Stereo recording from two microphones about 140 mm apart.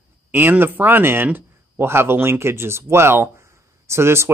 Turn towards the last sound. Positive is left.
turn(degrees=-20)  # may be behind; listen again after turning